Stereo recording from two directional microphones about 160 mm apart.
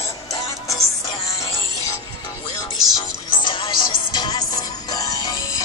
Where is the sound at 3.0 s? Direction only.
30° left (ahead or behind).